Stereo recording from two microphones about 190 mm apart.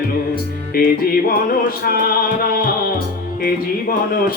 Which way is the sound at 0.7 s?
50° left (ahead or behind).